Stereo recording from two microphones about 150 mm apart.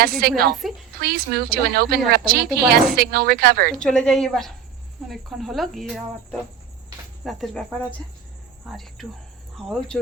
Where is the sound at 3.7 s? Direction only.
5° left (ahead or behind).